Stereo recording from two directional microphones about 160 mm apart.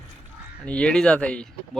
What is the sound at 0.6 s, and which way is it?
Speech, 5° left (ahead or behind).